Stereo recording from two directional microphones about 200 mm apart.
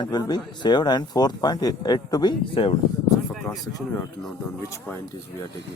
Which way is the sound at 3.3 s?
Centre (ahead or behind).